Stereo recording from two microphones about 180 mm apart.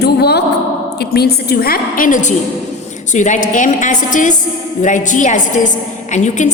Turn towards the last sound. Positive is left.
turn(degrees=40)  # may be behind; listen again after turning